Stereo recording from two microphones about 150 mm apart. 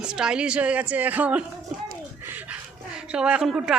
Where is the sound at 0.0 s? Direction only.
5° right (ahead or behind).